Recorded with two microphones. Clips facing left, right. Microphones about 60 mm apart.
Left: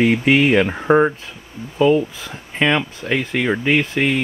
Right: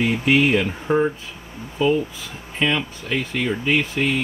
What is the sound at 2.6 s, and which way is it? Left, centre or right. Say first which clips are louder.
Speech: left 4 dB; left.